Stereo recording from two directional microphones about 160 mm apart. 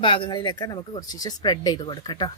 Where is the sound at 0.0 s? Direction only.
30° left (ahead or behind).